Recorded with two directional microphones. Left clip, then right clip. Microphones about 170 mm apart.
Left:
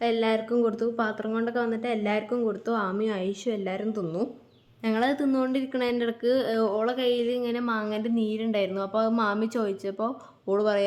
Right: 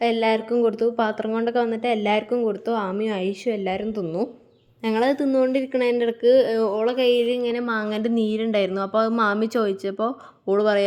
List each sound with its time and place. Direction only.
0.0 s speech: 20° right (ahead or behind)
7.8 s a woman's voice: 35° right (ahead or behind)